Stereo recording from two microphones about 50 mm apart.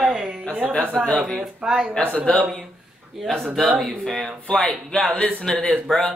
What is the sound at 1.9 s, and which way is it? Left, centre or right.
Speech, left.